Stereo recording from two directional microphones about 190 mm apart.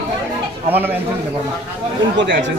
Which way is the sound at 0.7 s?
10° right (ahead or behind).